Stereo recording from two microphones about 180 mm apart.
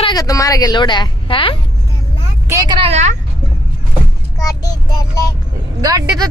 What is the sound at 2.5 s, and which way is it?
Speech, 20° right (ahead or behind).